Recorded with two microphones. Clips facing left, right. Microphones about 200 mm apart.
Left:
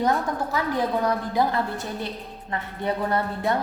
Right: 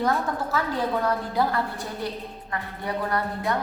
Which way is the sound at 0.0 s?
15° left (ahead or behind).